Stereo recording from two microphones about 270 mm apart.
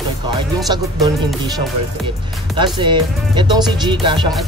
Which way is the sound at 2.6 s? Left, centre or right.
Centre.